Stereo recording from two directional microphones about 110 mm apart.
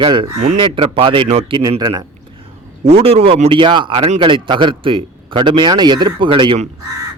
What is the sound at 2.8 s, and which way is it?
Speech, 65° right (ahead or behind).